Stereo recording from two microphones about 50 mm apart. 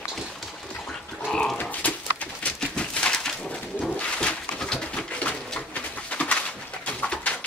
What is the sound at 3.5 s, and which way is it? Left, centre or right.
Pigeon, left.